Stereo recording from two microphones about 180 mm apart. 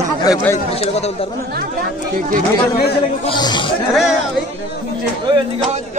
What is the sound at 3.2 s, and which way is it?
Speech, 25° left (ahead or behind).